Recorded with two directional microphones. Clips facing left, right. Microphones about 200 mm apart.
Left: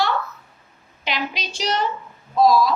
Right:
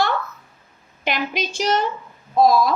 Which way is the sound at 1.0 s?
50° right (ahead or behind).